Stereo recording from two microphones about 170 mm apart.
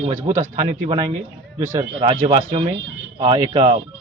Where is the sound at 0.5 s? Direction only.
25° right (ahead or behind).